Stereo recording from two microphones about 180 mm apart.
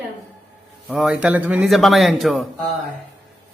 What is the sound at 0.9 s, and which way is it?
A man's voice, 5° right (ahead or behind).